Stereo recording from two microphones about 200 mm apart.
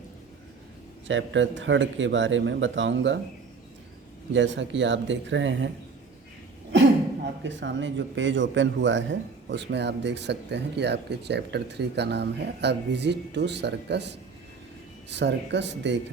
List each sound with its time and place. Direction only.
1.0 s speech: 70° right (ahead or behind)
4.3 s speech: 65° right (ahead or behind)
7.4 s speech: 65° right (ahead or behind)